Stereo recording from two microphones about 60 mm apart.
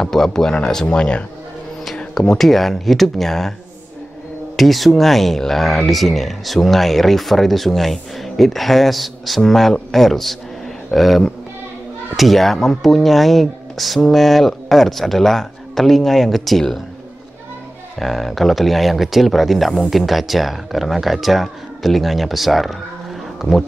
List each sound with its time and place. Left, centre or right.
0.0 s speech: centre
2.1 s speech: centre
4.6 s speech: centre
17.9 s speech: centre